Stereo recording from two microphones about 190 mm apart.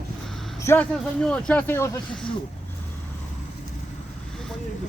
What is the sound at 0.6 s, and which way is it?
Vehicle, 15° left (ahead or behind).